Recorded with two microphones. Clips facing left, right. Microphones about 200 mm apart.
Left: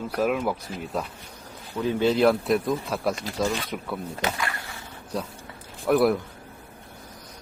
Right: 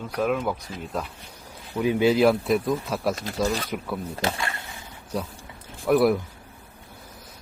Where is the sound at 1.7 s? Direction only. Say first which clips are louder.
Right 2 dB; 10° right (ahead or behind).